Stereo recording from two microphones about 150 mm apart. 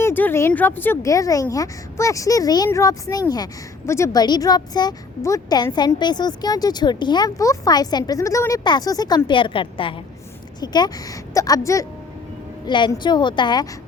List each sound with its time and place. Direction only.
0.0 s a woman's voice: 15° left (ahead or behind); by 13.7 s 30° left (ahead or behind)